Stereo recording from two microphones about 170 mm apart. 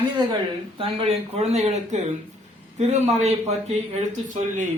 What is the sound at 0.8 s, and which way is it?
Speech, 35° right (ahead or behind).